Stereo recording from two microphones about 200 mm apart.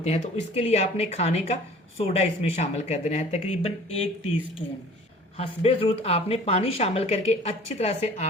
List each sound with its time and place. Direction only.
0.0 s speech: 35° left (ahead or behind)
5.4 s speech: 30° left (ahead or behind)